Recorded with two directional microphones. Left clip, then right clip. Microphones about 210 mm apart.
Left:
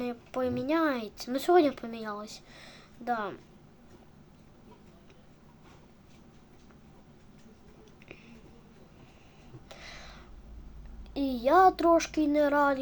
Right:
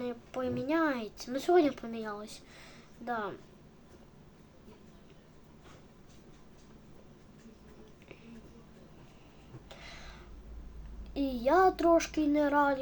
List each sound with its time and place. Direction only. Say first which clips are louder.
0.0 s speech: left 4 dB; 20° left (ahead or behind)
9.6 s a sound: left 3 dB; 10° left (ahead or behind)
11.1 s speech: left 3 dB; 15° left (ahead or behind)